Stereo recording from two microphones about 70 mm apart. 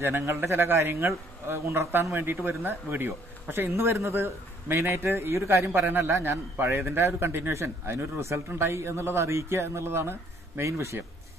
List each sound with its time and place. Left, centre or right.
0.0 s a man's voice: right